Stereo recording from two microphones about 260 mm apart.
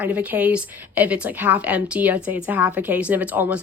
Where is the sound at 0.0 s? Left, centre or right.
Centre.